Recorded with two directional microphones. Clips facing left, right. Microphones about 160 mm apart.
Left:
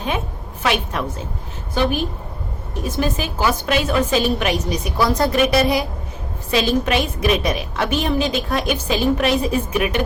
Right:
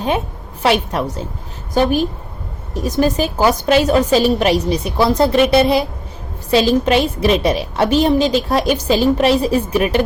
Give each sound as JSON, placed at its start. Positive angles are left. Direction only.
{"t": 0.6, "sound": "a woman's voice", "side_deg": -35}